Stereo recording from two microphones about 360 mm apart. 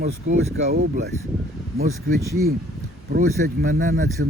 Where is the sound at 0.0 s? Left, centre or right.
Centre.